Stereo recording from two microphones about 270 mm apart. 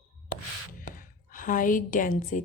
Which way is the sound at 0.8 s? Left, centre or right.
Left.